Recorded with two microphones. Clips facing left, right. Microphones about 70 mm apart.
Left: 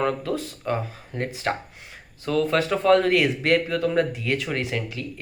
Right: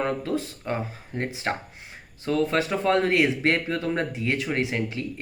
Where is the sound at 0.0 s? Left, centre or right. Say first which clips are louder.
Left 1 dB; right.